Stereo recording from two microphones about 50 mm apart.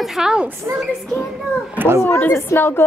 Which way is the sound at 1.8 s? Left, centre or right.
Right.